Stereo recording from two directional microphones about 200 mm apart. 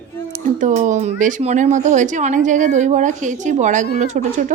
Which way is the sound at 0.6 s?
35° right (ahead or behind).